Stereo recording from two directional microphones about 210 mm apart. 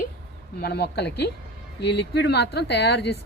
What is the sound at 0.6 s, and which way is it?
A woman's voice, 50° left (ahead or behind).